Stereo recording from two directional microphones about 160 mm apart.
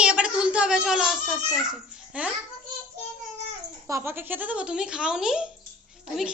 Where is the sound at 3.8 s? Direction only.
15° right (ahead or behind).